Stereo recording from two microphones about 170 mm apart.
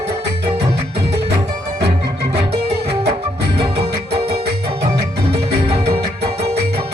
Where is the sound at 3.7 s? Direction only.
35° right (ahead or behind).